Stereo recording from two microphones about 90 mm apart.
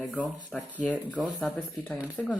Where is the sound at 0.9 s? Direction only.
15° right (ahead or behind).